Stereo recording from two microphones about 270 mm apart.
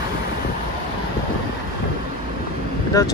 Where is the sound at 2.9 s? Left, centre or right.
Centre.